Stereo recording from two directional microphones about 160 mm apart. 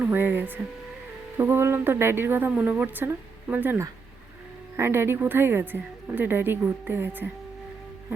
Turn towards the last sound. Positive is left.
turn(degrees=-15)  # may be behind; listen again after turning